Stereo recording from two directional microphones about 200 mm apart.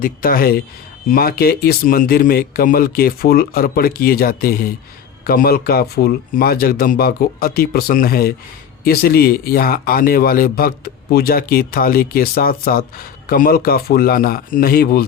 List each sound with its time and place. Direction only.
0.0 s speech: 45° left (ahead or behind)